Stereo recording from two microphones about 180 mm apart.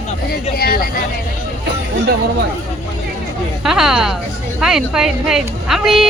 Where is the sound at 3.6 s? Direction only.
5° right (ahead or behind).